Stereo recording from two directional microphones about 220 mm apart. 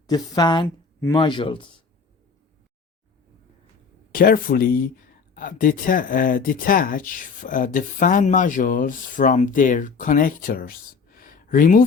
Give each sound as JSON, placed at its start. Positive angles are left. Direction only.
{"t": 0.1, "sound": "speech", "side_deg": 20}
{"t": 4.1, "sound": "speech", "side_deg": 40}